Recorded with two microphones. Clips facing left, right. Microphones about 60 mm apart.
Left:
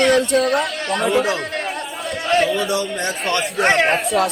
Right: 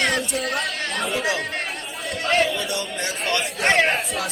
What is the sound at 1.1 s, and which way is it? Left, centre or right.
Speech, centre.